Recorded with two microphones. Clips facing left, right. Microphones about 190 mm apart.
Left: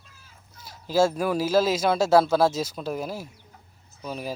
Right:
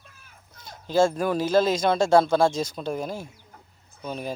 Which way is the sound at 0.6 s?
5° left (ahead or behind).